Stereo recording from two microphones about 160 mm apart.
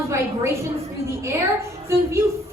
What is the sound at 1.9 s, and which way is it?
Speech, 15° right (ahead or behind).